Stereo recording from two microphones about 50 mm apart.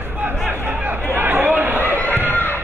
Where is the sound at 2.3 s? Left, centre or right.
Left.